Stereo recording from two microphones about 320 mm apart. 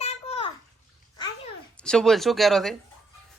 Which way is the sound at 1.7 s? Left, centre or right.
Centre.